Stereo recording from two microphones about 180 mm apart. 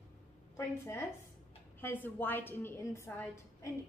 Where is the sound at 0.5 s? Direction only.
15° left (ahead or behind).